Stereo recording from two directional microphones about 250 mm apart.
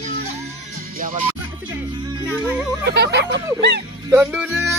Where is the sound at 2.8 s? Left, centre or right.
Right.